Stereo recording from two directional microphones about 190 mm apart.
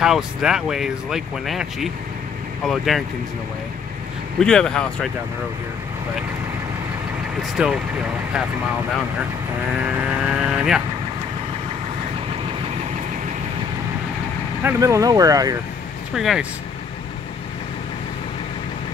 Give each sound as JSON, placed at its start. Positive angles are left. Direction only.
{"t": 0.0, "sound": "speech", "side_deg": -5}
{"t": 4.4, "sound": "speech", "side_deg": 5}
{"t": 7.5, "sound": "speech", "side_deg": -5}
{"t": 10.2, "sound": "speech", "side_deg": -5}
{"t": 14.6, "sound": "speech", "side_deg": -15}
{"t": 16.2, "sound": "speech", "side_deg": 0}